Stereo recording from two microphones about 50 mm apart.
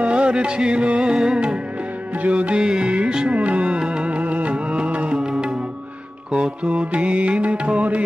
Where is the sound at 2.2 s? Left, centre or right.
Right.